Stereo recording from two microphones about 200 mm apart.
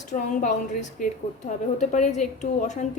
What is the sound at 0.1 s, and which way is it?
A woman's voice, 40° left (ahead or behind).